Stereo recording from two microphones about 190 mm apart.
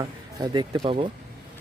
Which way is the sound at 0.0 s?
20° right (ahead or behind).